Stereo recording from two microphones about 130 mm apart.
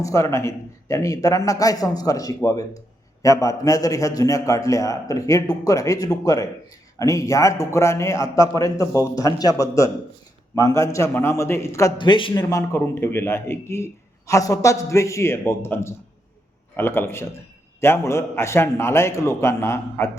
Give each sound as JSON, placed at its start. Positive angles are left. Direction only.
{"t": 0.0, "sound": "speech", "side_deg": 25}
{"t": 11.9, "sound": "a man's voice", "side_deg": 40}
{"t": 12.3, "sound": "a man's voice", "side_deg": 25}